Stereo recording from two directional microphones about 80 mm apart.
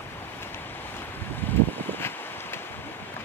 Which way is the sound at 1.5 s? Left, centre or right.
Left.